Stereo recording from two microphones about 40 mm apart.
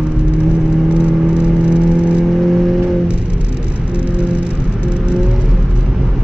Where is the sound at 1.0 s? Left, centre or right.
Right.